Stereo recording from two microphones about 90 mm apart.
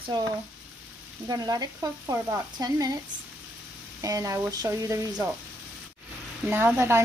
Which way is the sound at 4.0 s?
40° right (ahead or behind).